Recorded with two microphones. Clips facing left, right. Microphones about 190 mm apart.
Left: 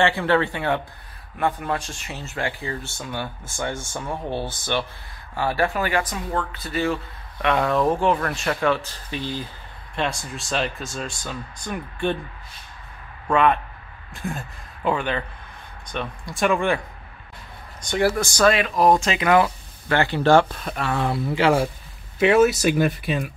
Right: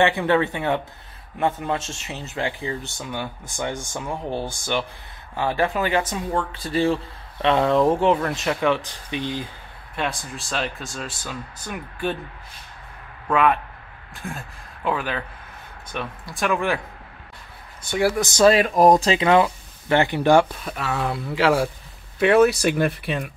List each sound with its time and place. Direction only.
0.0 s speech: 15° right (ahead or behind)
9.9 s speech: centre (ahead or behind)
13.3 s speech: 5° right (ahead or behind)
17.8 s speech: 10° right (ahead or behind)
18.2 s speech: 25° right (ahead or behind)
18.5 s speech: 40° right (ahead or behind); by 23.3 s centre (ahead or behind)